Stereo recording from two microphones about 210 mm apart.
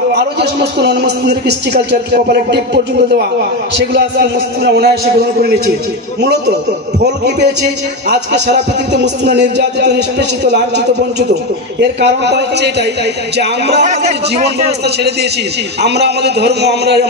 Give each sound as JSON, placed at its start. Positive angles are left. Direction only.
{"t": 0.1, "sound": "speech", "side_deg": -50}
{"t": 8.5, "sound": "speech", "side_deg": -55}
{"t": 13.8, "sound": "a man's voice", "side_deg": -30}
{"t": 15.8, "sound": "speech", "side_deg": -50}